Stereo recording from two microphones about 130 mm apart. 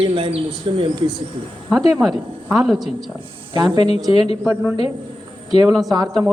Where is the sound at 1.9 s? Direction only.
Centre (ahead or behind).